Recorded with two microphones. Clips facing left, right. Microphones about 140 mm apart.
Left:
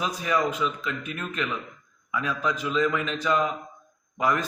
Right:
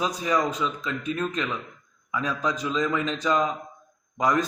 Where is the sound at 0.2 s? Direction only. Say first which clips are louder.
Left 2 dB; 20° right (ahead or behind).